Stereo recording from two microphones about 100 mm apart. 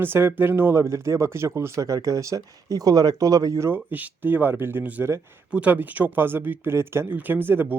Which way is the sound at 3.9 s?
15° right (ahead or behind).